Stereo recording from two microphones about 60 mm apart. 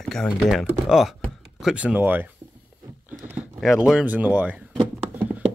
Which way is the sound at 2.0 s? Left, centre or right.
Right.